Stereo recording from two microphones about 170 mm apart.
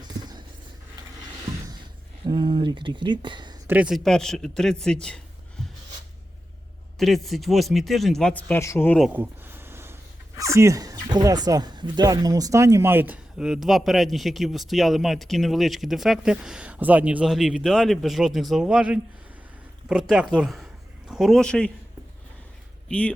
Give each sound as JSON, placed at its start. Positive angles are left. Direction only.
{"t": 0.0, "sound": "a sound", "side_deg": -25}
{"t": 2.2, "sound": "speech", "side_deg": -25}
{"t": 3.7, "sound": "speech", "side_deg": -5}
{"t": 5.6, "sound": "a sound", "side_deg": 5}
{"t": 7.0, "sound": "speech", "side_deg": 0}
{"t": 9.0, "sound": "speech", "side_deg": -5}
{"t": 22.9, "sound": "speech", "side_deg": 10}